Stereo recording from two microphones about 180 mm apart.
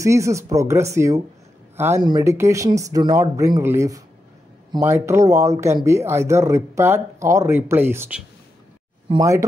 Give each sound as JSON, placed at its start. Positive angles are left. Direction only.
{"t": 0.0, "sound": "speech", "side_deg": -15}